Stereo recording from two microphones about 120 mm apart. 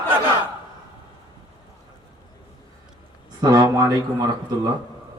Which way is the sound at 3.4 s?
35° right (ahead or behind).